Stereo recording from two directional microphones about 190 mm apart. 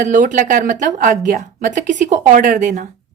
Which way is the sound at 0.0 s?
40° right (ahead or behind).